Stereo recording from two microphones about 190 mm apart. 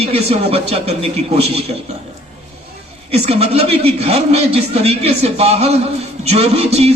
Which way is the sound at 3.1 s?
35° right (ahead or behind).